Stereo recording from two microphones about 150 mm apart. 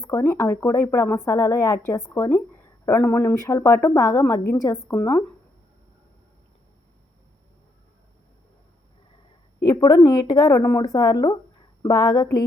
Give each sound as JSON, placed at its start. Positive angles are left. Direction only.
{"t": 0.0, "sound": "speech", "side_deg": 20}
{"t": 9.6, "sound": "speech", "side_deg": 25}